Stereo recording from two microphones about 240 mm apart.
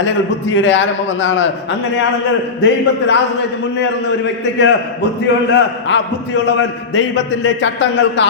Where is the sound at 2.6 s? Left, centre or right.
Left.